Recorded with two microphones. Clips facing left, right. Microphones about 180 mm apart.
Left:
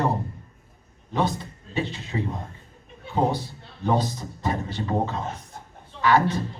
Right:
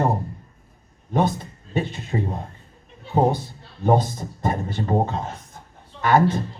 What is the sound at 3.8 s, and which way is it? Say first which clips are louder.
A man's voice: right 4 dB; 50° right (ahead or behind).